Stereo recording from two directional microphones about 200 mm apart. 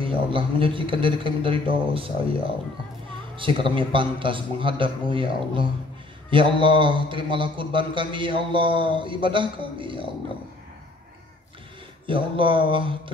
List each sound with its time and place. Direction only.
0.0 s speech: 25° right (ahead or behind)
3.3 s speech: 25° right (ahead or behind)
12.1 s speech: 25° right (ahead or behind)